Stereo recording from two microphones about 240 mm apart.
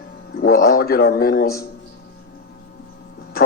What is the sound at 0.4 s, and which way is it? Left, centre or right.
Speech, left.